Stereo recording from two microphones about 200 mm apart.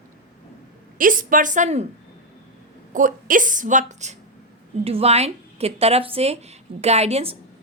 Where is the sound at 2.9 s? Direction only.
40° right (ahead or behind).